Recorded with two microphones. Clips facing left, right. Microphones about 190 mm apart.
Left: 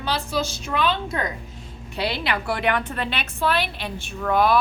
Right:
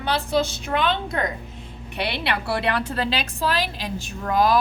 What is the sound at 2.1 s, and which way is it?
A woman's voice, 30° right (ahead or behind).